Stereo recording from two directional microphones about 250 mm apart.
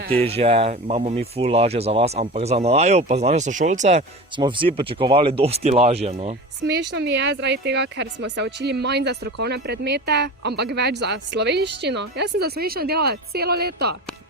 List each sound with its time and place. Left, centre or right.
0.2 s speech: right
6.9 s a woman's voice: right